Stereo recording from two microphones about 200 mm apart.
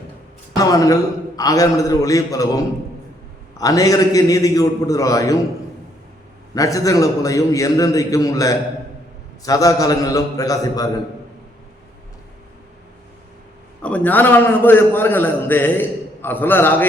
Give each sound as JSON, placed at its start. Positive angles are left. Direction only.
{"t": 0.5, "sound": "a man's voice", "side_deg": 15}
{"t": 6.5, "sound": "a man's voice", "side_deg": 15}
{"t": 13.8, "sound": "a man's voice", "side_deg": 10}